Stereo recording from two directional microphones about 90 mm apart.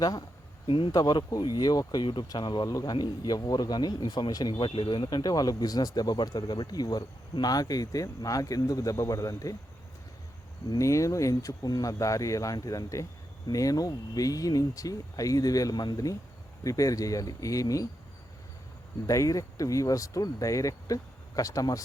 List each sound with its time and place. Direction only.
0.0 s speech: 45° left (ahead or behind)
2.6 s speech: 40° left (ahead or behind)
4.5 s speech: 70° left (ahead or behind); by 9.6 s 40° left (ahead or behind)
10.8 s speech: 35° left (ahead or behind)
19.0 s speech: 40° left (ahead or behind)